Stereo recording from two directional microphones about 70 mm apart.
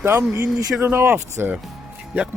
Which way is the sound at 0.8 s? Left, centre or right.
Right.